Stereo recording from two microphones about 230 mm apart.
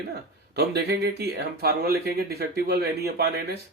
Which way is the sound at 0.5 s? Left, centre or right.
Right.